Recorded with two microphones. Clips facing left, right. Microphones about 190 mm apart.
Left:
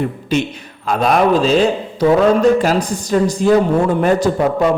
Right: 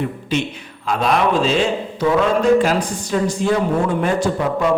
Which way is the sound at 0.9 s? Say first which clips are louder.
Left 4 dB; 45° left (ahead or behind).